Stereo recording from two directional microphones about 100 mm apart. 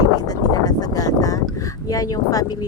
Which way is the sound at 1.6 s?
35° left (ahead or behind).